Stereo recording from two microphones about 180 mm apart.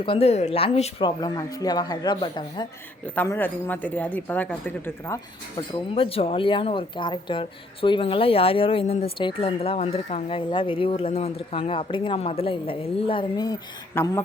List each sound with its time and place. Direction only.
0.0 s speech: 30° left (ahead or behind)
3.2 s speech: 10° left (ahead or behind)
5.5 s speech: 30° left (ahead or behind)